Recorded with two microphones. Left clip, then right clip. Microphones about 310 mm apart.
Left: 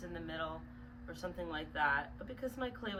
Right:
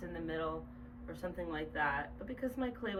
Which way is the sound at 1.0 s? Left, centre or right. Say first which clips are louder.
Right 1 dB; centre.